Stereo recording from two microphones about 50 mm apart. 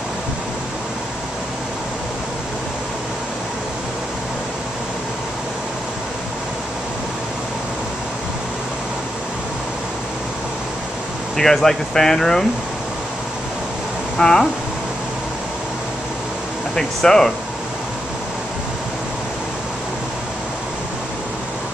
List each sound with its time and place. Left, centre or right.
11.3 s speech: centre
14.1 s speech: centre
16.7 s speech: centre